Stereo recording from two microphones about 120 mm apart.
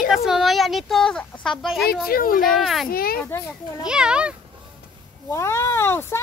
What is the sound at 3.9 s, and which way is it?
Speech, 5° right (ahead or behind).